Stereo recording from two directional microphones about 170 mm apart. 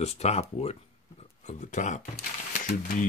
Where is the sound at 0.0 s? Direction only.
40° left (ahead or behind).